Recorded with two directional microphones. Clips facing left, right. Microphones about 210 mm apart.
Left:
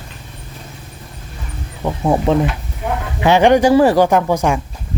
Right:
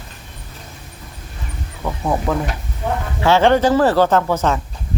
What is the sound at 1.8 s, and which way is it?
Speech, 25° left (ahead or behind).